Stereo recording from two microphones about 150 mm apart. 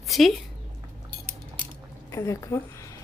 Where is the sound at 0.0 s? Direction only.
Centre (ahead or behind).